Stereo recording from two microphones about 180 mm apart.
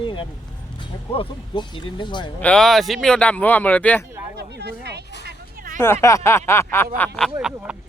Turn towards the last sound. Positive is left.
turn(degrees=-10)  # may be behind; listen again after turning